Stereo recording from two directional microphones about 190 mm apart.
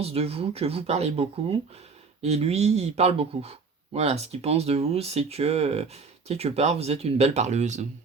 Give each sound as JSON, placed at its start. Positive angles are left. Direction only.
{"t": 0.0, "sound": "speech", "side_deg": -30}